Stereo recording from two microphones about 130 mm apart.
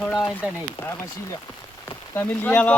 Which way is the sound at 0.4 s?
10° right (ahead or behind).